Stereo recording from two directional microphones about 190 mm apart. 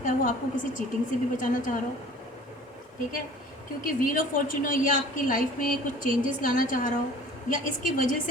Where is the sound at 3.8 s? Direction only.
45° left (ahead or behind).